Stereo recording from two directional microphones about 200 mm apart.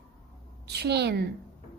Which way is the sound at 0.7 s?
55° right (ahead or behind).